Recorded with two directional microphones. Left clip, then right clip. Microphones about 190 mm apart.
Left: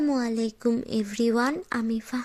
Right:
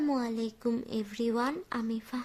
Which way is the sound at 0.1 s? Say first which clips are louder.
Left 5 dB; 20° left (ahead or behind).